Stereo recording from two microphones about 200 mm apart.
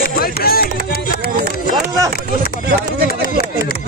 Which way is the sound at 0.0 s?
50° left (ahead or behind).